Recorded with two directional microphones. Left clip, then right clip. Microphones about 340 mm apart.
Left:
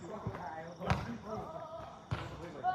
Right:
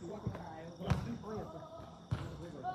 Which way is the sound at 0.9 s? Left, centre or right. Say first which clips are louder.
Left 5 dB; centre.